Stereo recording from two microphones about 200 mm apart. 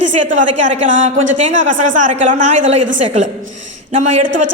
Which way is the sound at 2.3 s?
40° right (ahead or behind).